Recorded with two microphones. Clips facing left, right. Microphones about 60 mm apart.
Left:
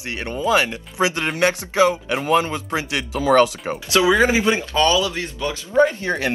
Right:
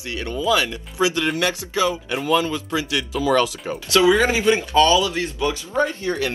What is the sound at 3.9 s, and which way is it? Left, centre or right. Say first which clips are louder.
Speech: even; left.